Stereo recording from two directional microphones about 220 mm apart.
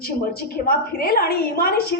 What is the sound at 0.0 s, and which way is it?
A woman's voice, 40° left (ahead or behind).